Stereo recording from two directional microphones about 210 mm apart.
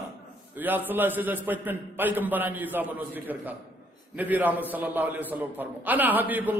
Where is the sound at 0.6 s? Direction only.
10° right (ahead or behind).